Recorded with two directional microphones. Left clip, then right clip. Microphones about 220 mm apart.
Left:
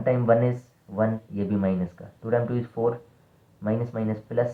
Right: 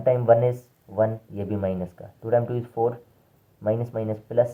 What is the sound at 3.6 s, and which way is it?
Speech, 20° right (ahead or behind).